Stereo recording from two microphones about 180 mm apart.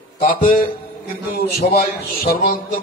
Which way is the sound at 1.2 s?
55° left (ahead or behind).